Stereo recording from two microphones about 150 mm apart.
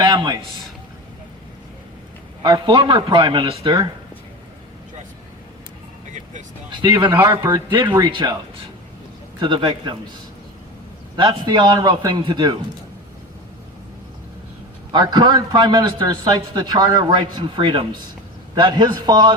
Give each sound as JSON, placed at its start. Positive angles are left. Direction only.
{"t": 0.0, "sound": "a man's voice", "side_deg": -25}
{"t": 2.4, "sound": "a man's voice", "side_deg": -30}
{"t": 7.2, "sound": "a man's voice", "side_deg": -20}
{"t": 8.1, "sound": "a man's voice", "side_deg": -30}
{"t": 9.4, "sound": "a man's voice", "side_deg": -30}
{"t": 11.2, "sound": "a man's voice", "side_deg": -30}
{"t": 14.9, "sound": "a man's voice", "side_deg": -30}